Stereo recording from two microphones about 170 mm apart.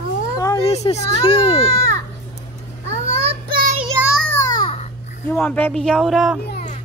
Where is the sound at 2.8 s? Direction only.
90° right.